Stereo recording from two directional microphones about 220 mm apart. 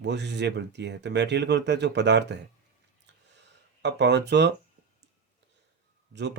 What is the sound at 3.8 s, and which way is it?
Speech, 50° right (ahead or behind).